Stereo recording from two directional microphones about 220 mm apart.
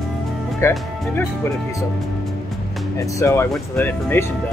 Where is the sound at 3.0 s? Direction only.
15° left (ahead or behind).